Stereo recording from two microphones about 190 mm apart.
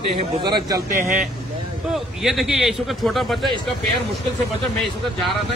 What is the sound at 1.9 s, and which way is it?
Speech, centre (ahead or behind).